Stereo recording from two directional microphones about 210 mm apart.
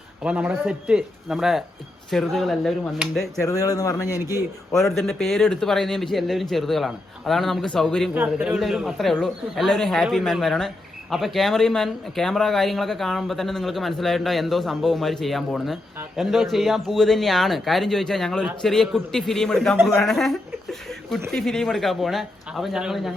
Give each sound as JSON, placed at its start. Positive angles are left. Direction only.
{"t": 0.2, "sound": "speech", "side_deg": -5}
{"t": 3.4, "sound": "a man's voice", "side_deg": 15}
{"t": 4.7, "sound": "speech", "side_deg": 0}